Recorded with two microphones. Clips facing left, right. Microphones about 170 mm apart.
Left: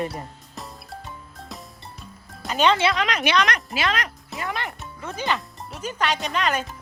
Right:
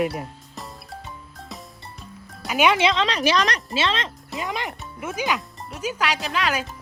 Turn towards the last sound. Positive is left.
turn(degrees=-5)  # may be behind; listen again after turning